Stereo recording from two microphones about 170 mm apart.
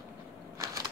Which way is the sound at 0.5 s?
20° right (ahead or behind).